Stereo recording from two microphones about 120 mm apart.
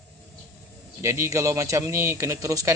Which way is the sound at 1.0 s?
25° right (ahead or behind).